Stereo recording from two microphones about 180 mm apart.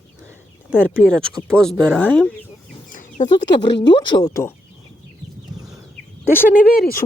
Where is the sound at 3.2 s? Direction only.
45° left (ahead or behind).